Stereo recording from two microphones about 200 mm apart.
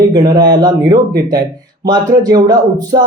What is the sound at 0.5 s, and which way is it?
A man's voice, 20° right (ahead or behind).